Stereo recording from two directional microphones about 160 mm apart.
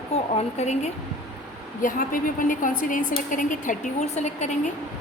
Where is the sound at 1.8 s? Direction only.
60° left (ahead or behind).